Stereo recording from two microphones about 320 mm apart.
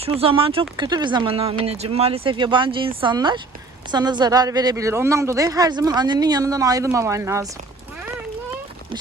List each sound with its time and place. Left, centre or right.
0.0 s speech: centre